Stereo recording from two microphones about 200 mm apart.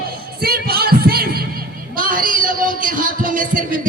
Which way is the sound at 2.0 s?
45° right (ahead or behind).